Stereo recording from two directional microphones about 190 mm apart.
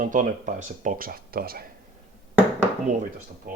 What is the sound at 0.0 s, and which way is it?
Speech, 45° right (ahead or behind).